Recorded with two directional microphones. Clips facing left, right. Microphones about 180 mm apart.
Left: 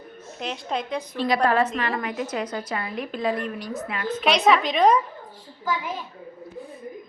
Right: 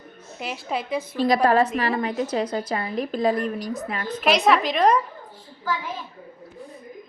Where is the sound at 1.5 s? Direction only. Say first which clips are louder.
Right 3 dB; 35° right (ahead or behind).